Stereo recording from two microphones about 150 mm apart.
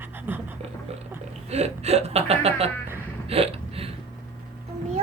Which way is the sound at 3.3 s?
40° right (ahead or behind).